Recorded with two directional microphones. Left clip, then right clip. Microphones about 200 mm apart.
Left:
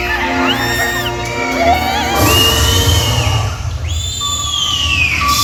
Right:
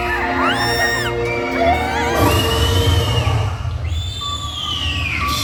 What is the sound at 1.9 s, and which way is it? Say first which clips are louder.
Music: left 3 dB; 15° left (ahead or behind).